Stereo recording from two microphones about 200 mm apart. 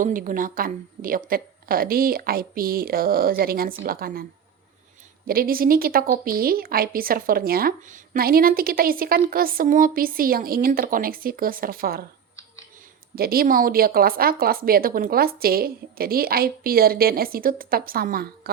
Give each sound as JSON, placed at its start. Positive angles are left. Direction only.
{"t": 0.0, "sound": "a woman's voice", "side_deg": -40}
{"t": 13.1, "sound": "a woman's voice", "side_deg": -50}